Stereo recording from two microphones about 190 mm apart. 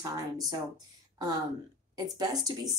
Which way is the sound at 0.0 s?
20° right (ahead or behind).